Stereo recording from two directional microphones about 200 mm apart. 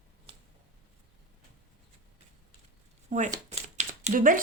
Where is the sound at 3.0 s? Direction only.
35° right (ahead or behind).